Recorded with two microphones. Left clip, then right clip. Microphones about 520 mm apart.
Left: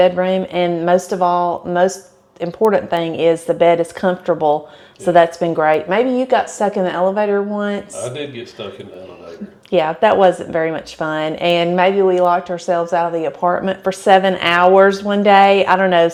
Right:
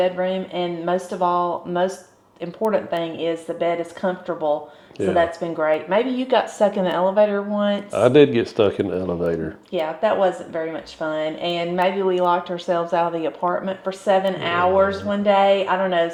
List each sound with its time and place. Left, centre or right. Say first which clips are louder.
0.0 s speech: left 7 dB; left
6.1 s speech: left 4 dB; left
8.1 s speech: right 13 dB; right
9.7 s speech: left 7 dB; left